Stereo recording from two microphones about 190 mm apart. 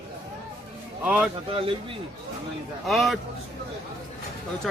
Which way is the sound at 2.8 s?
Centre (ahead or behind).